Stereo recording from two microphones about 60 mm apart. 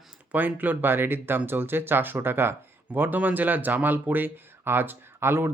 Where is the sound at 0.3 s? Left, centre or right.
Right.